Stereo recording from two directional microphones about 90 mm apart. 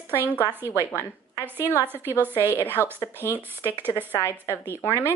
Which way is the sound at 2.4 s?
30° left (ahead or behind).